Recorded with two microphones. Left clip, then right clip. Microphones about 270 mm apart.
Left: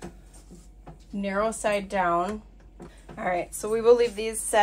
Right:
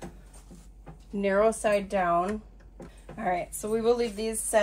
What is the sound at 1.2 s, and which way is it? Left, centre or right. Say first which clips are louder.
Speech: right 2 dB; centre.